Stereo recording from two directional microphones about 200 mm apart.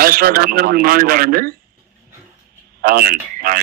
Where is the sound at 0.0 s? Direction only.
45° right (ahead or behind).